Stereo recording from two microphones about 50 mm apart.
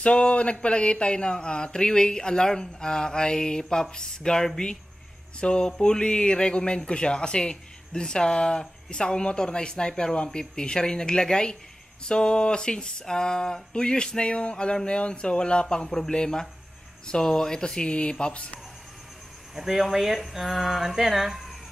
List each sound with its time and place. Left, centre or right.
0.0 s speech: left
19.5 s speech: centre